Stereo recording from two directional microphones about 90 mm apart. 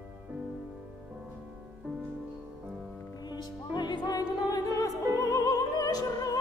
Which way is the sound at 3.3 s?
55° left (ahead or behind).